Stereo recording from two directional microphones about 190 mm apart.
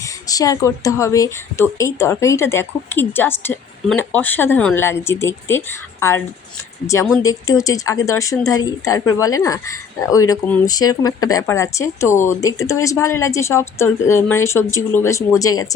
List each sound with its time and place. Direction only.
0.0 s speech: 20° left (ahead or behind)